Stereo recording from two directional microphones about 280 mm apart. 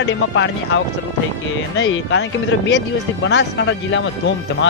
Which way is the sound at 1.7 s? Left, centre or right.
Left.